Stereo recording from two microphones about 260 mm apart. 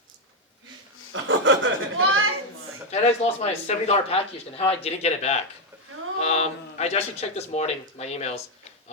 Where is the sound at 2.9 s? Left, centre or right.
Left.